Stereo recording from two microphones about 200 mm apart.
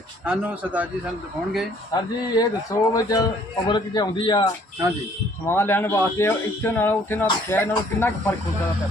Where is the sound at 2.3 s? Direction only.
20° left (ahead or behind).